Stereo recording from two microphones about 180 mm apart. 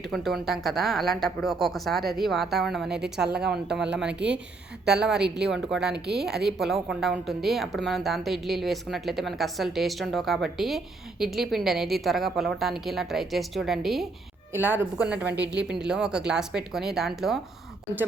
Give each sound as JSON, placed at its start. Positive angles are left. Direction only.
{"t": 0.0, "sound": "a woman's voice", "side_deg": 0}
{"t": 4.1, "sound": "a woman's voice", "side_deg": -75}
{"t": 4.9, "sound": "a woman's voice", "side_deg": -5}
{"t": 14.5, "sound": "a woman's voice", "side_deg": -10}